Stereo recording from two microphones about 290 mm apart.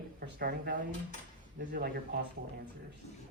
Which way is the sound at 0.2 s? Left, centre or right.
Right.